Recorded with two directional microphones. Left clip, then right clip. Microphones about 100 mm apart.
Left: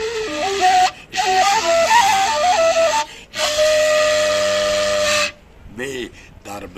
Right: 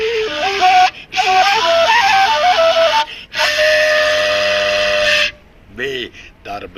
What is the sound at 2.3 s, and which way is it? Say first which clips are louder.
Music: right 3 dB; 15° right (ahead or behind).